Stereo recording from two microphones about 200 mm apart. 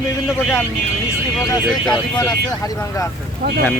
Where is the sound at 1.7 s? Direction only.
5° left (ahead or behind).